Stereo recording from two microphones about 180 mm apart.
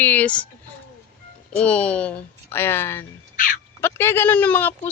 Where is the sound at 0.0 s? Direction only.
10° left (ahead or behind).